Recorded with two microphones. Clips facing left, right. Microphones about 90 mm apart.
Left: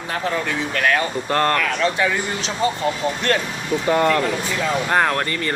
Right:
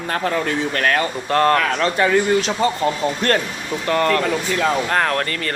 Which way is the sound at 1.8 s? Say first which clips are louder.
Right 3 dB; 45° right (ahead or behind).